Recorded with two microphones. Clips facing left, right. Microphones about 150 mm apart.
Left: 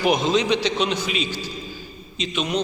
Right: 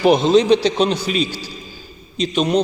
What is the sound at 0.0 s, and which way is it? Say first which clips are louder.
A man's voice: right 7 dB; 30° right (ahead or behind).